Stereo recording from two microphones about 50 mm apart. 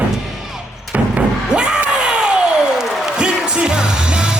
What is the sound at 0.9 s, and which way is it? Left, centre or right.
Slam, right.